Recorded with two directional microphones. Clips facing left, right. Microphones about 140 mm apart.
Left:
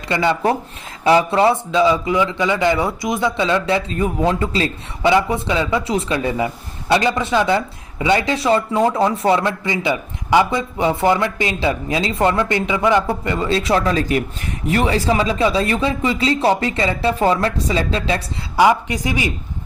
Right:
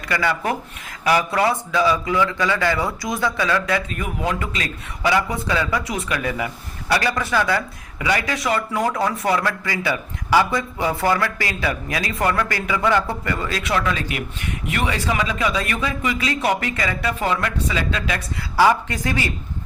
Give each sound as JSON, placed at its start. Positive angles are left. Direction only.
{"t": 0.1, "sound": "a man's voice", "side_deg": 25}
{"t": 18.6, "sound": "a woman's voice", "side_deg": 15}